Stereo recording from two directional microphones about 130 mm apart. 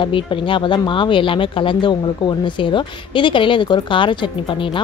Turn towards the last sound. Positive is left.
turn(degrees=40)  # may be behind; listen again after turning